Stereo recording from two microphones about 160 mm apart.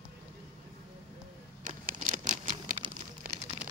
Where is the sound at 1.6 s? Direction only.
55° right (ahead or behind).